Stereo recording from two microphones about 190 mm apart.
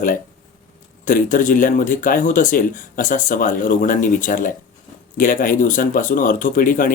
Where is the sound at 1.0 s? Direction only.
45° left (ahead or behind).